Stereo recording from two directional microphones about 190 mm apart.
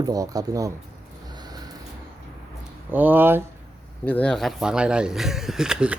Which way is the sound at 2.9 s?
10° right (ahead or behind).